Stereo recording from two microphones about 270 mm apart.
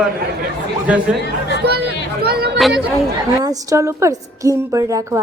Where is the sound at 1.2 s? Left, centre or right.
Left.